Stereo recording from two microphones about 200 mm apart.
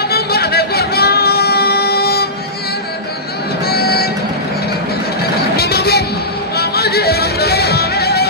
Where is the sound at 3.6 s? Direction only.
50° left (ahead or behind).